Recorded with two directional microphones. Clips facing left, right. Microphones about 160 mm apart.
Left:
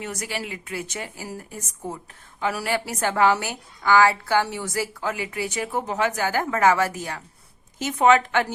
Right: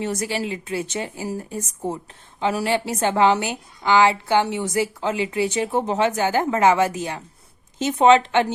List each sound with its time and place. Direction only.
0.0 s a woman's voice: 30° right (ahead or behind)